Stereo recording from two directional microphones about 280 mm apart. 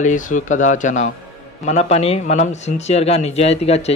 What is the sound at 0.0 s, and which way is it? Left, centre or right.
Speech, left.